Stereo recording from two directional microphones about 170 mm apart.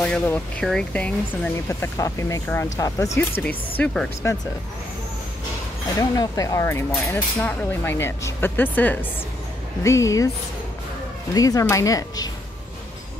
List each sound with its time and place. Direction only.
0.0 s speech: 5° left (ahead or behind)
5.9 s speech: 20° left (ahead or behind)
11.3 s speech: 20° left (ahead or behind)